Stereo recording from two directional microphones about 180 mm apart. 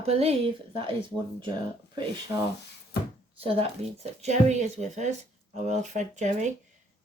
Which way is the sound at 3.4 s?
35° right (ahead or behind).